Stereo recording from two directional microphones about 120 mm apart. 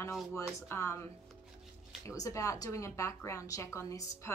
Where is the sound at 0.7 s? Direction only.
20° left (ahead or behind).